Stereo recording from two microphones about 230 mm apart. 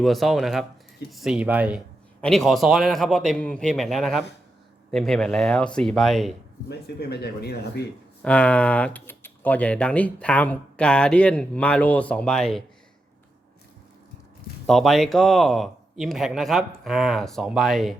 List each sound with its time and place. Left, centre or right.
0.0 s speech: centre
6.7 s speech: left
8.2 s speech: centre
14.7 s speech: centre